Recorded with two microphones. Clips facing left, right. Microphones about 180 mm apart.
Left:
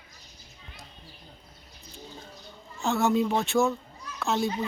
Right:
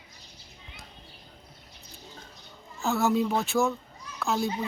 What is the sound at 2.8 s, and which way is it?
Speech, centre (ahead or behind).